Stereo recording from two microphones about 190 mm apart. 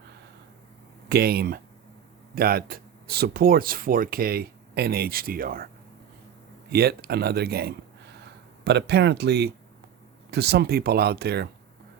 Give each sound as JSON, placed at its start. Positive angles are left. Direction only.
{"t": 1.0, "sound": "speech", "side_deg": -55}
{"t": 6.7, "sound": "a man's voice", "side_deg": -55}